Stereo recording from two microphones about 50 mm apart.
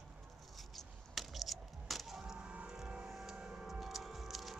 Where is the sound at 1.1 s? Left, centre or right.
Centre.